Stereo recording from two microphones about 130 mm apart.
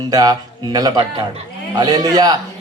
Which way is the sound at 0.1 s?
30° right (ahead or behind).